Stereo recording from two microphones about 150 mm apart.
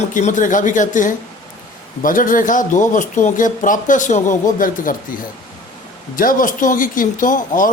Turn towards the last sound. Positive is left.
turn(degrees=65)  # may be behind; listen again after turning